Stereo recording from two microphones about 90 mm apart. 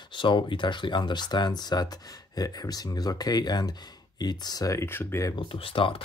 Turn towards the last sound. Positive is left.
turn(degrees=85)